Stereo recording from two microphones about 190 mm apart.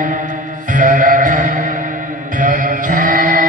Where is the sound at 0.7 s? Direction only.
45° right (ahead or behind).